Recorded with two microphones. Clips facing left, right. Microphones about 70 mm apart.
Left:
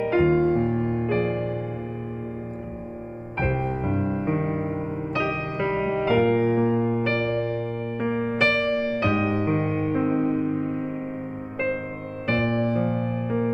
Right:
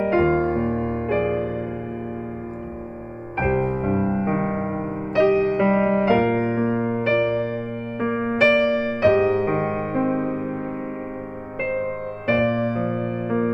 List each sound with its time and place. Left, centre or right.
0.0 s music: centre
0.3 s music: right
1.0 s music: centre
3.3 s music: centre
3.6 s music: right
5.9 s music: centre
6.7 s electric piano: right
7.0 s electric piano: centre
8.5 s music: centre
9.5 s music: right